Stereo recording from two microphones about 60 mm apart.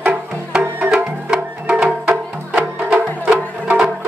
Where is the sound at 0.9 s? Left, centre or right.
Centre.